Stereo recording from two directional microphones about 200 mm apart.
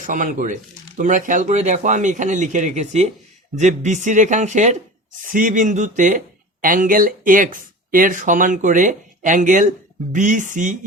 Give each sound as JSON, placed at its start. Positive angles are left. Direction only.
{"t": 0.0, "sound": "speech", "side_deg": -40}